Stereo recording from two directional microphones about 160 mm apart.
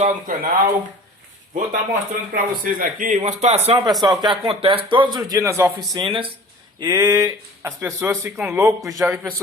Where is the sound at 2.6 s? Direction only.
60° right (ahead or behind); by 3.7 s 45° right (ahead or behind).